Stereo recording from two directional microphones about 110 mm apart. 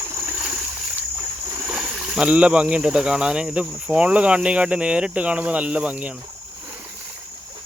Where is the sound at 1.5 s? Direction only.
10° right (ahead or behind).